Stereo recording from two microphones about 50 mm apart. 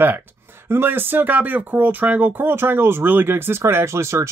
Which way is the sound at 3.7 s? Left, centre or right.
Right.